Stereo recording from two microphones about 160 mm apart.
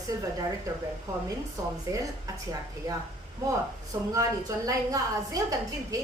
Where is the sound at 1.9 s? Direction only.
20° right (ahead or behind).